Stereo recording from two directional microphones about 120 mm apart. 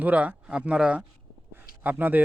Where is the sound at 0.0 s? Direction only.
10° right (ahead or behind).